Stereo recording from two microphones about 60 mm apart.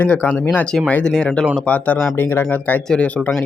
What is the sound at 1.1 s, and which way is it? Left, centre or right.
Speech, centre.